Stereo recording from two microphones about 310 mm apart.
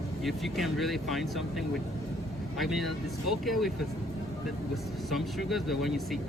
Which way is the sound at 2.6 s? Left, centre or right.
Centre.